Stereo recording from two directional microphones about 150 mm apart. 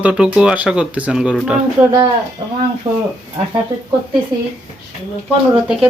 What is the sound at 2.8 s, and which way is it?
Speech, 40° right (ahead or behind).